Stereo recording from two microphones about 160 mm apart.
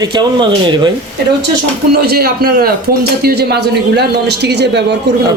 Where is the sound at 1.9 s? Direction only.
75° right (ahead or behind).